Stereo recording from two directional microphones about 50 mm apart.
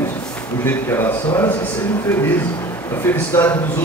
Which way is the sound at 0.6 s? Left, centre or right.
Left.